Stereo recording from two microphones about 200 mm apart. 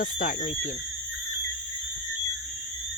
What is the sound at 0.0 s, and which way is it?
Speech, 40° left (ahead or behind).